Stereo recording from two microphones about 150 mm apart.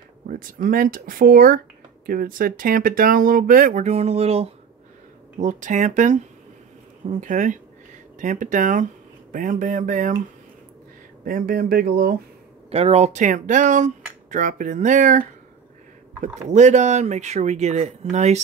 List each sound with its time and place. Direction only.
0.3 s speech: 65° right (ahead or behind); by 4.5 s 45° right (ahead or behind)
5.4 s speech: 55° right (ahead or behind)
11.2 s speech: 75° right (ahead or behind); by 12.2 s 90° right
12.7 s speech: 45° right (ahead or behind)
16.4 s speech: 50° right (ahead or behind)